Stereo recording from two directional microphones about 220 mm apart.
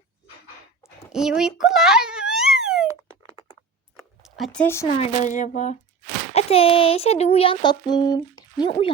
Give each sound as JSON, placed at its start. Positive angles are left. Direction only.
{"t": 1.1, "sound": "a sound", "side_deg": -5}
{"t": 4.9, "sound": "speech", "side_deg": 35}
{"t": 6.3, "sound": "music", "side_deg": 25}